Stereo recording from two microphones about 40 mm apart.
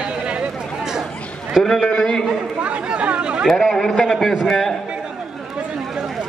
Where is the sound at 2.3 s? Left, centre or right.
Right.